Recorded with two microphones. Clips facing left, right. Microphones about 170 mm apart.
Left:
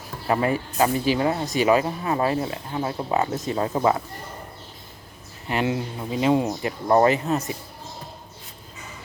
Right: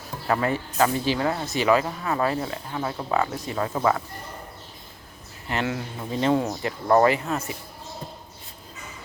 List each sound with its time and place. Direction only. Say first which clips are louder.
0.3 s speech: left 2 dB; 20° left (ahead or behind)
5.5 s speech: left 3 dB; 20° left (ahead or behind)